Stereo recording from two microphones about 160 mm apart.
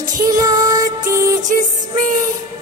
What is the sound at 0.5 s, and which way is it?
Music, 20° right (ahead or behind).